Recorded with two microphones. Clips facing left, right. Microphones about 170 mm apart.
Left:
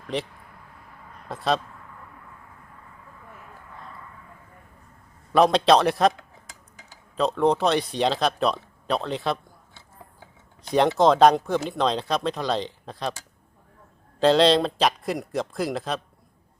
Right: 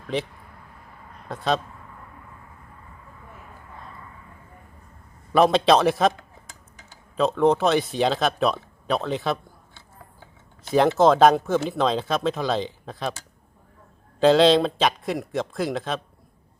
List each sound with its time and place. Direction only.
0.1 s a man's voice: centre (ahead or behind)
1.3 s a man's voice: centre (ahead or behind)
5.3 s a man's voice: centre (ahead or behind)